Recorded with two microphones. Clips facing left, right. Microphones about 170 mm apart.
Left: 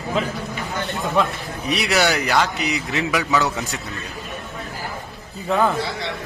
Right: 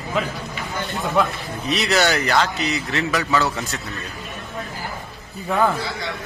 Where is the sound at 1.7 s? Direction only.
10° left (ahead or behind).